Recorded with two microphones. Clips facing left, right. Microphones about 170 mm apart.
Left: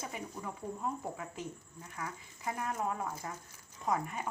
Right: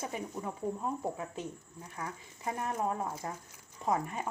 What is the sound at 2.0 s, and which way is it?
Speech, 25° right (ahead or behind).